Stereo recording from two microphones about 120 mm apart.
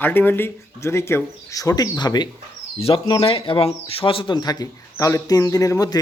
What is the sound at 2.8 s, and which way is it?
Speech, 50° left (ahead or behind).